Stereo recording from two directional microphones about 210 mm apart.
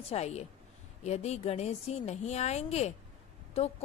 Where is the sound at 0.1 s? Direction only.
30° left (ahead or behind).